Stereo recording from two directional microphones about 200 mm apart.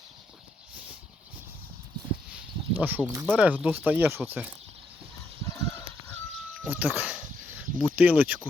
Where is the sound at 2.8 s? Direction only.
10° right (ahead or behind).